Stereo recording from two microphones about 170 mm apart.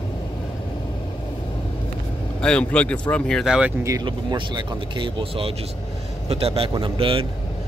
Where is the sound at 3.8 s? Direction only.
20° right (ahead or behind).